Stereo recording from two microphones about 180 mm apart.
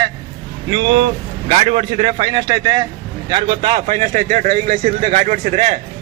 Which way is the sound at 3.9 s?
45° right (ahead or behind).